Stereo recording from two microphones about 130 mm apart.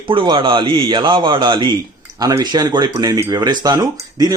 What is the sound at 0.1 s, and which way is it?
Speech, 40° right (ahead or behind).